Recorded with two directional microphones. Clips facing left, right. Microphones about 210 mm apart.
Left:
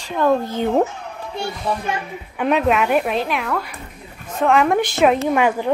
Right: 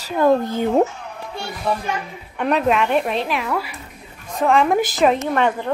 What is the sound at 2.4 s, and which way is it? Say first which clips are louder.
A woman's voice: left 1 dB; centre (ahead or behind).